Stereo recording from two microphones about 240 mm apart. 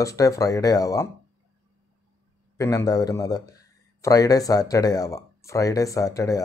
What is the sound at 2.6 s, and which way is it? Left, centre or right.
Speech, centre.